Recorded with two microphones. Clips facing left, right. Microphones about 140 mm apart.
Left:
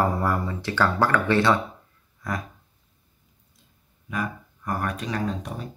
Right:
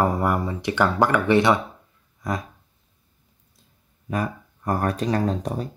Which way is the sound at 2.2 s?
20° right (ahead or behind).